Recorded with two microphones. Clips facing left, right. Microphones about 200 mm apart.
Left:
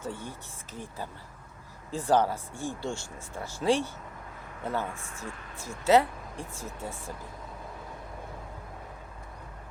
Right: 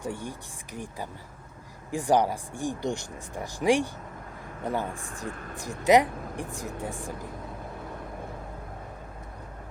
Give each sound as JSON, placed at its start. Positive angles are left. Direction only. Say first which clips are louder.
{"t": 0.0, "sound": "speech", "louder": "right 3 dB", "side_deg": -15}